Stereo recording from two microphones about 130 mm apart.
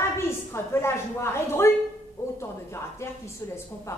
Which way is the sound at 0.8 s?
20° left (ahead or behind).